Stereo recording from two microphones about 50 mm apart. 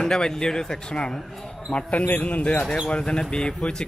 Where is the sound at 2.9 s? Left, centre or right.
Centre.